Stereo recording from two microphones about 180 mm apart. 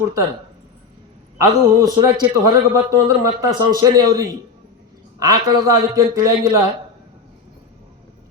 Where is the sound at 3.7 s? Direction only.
20° right (ahead or behind).